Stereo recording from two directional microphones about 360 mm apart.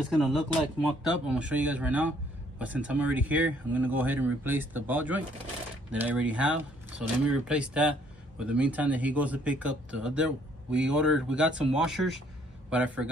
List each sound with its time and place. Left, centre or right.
0.1 s speech: centre